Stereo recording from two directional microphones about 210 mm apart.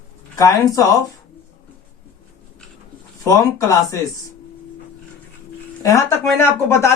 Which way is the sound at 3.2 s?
15° left (ahead or behind).